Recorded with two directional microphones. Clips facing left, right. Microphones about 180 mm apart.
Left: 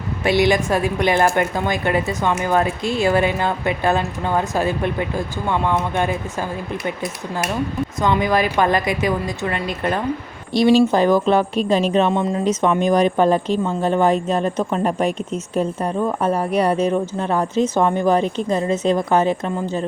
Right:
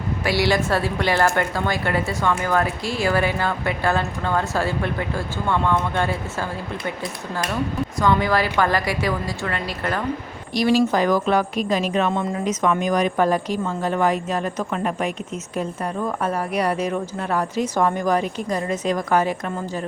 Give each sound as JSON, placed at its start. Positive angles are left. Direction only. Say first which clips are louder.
{"t": 0.3, "sound": "speech", "louder": "left 4 dB", "side_deg": 20}